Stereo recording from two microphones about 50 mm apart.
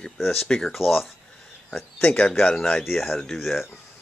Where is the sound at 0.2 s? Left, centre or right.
Centre.